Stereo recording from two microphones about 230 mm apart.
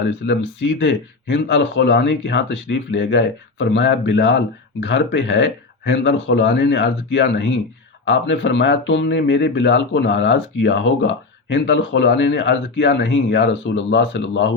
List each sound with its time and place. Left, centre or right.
0.0 s speech: left